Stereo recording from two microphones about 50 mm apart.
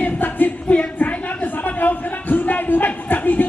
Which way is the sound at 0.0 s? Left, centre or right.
Left.